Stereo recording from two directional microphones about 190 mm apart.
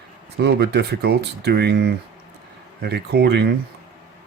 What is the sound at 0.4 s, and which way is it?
Speech, 60° right (ahead or behind).